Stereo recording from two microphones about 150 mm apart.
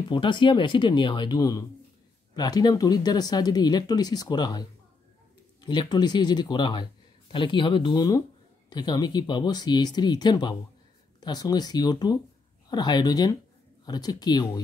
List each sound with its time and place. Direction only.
0.1 s speech: 30° left (ahead or behind)